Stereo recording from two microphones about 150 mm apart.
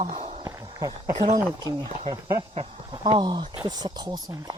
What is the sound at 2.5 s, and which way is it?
Speech, 40° right (ahead or behind).